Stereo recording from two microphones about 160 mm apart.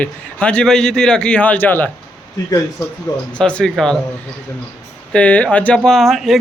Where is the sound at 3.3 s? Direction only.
5° left (ahead or behind).